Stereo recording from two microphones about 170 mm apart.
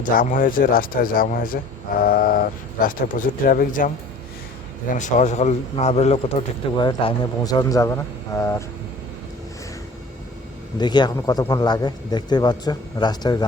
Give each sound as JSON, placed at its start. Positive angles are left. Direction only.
{"t": 0.0, "sound": "speech", "side_deg": 50}
{"t": 4.9, "sound": "a man's voice", "side_deg": 45}
{"t": 6.7, "sound": "a man's voice", "side_deg": 25}
{"t": 10.8, "sound": "a man's voice", "side_deg": 25}